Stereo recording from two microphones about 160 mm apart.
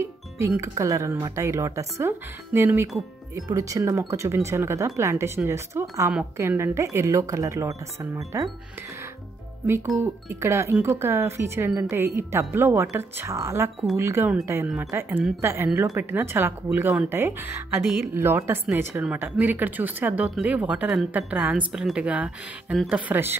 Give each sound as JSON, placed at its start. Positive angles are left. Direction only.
{"t": 0.0, "sound": "speech", "side_deg": -15}
{"t": 9.7, "sound": "speech", "side_deg": -20}